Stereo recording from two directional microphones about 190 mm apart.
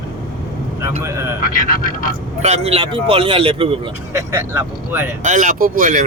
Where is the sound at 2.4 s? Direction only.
35° right (ahead or behind).